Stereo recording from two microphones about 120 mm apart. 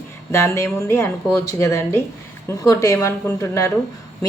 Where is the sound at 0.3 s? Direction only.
20° left (ahead or behind).